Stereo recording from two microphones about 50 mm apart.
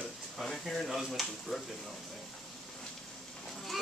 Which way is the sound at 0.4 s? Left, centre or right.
Centre.